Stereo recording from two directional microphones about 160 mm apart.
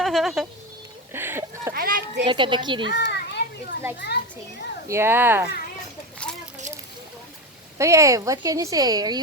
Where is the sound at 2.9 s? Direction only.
90° left.